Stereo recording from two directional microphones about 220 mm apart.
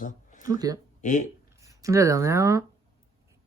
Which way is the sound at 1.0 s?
35° left (ahead or behind).